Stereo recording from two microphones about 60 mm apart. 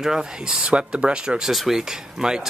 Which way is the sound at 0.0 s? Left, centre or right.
Centre.